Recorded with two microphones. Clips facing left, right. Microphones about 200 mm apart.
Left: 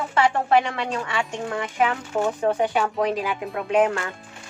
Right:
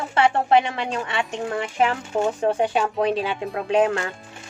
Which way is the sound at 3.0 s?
30° right (ahead or behind).